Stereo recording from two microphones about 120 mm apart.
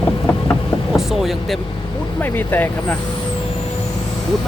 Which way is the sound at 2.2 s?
15° left (ahead or behind).